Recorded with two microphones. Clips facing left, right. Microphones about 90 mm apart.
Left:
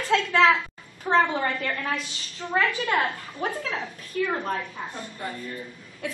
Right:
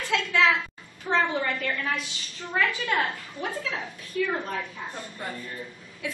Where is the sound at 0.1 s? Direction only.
35° left (ahead or behind).